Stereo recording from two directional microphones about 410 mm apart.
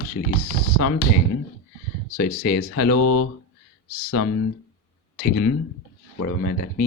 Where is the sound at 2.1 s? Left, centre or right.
Left.